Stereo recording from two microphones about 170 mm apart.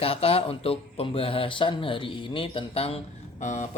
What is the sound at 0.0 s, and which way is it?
Speech, 35° left (ahead or behind).